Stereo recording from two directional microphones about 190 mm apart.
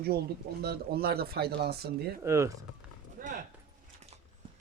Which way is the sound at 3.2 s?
45° right (ahead or behind).